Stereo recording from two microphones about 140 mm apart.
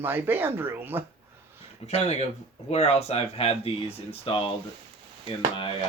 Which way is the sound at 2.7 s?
50° left (ahead or behind).